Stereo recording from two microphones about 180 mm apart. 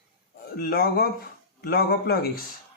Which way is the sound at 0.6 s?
55° left (ahead or behind).